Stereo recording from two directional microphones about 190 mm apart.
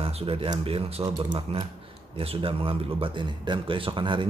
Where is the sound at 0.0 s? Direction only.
30° right (ahead or behind).